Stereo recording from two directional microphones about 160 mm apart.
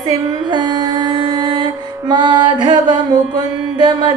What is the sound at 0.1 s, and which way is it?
Music, 30° right (ahead or behind).